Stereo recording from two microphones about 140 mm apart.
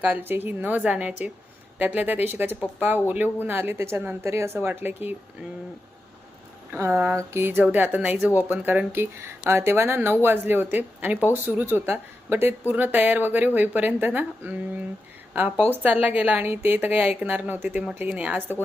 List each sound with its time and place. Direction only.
0.0 s speech: 10° right (ahead or behind)
6.7 s speech: 15° right (ahead or behind)